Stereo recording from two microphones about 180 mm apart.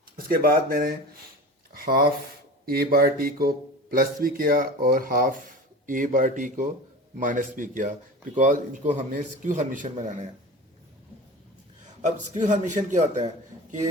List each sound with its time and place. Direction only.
0.2 s speech: 55° right (ahead or behind)
12.0 s speech: 40° right (ahead or behind)